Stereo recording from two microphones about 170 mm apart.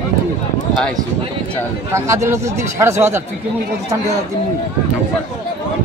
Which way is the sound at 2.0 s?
15° right (ahead or behind).